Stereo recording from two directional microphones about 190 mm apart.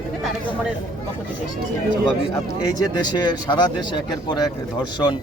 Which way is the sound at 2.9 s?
20° left (ahead or behind).